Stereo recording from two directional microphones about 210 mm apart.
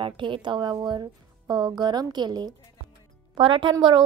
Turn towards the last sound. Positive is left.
turn(degrees=-20)  # may be behind; listen again after turning